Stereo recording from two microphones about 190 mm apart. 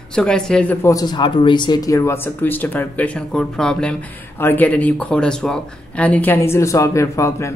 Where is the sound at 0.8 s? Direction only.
20° left (ahead or behind).